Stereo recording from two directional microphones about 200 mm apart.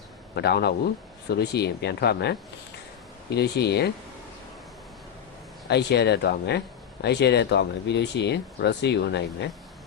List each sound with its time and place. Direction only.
0.3 s speech: 55° left (ahead or behind)
5.6 s speech: 55° left (ahead or behind)